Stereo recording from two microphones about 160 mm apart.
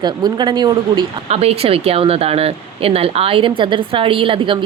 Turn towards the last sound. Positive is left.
turn(degrees=-35)  # may be behind; listen again after turning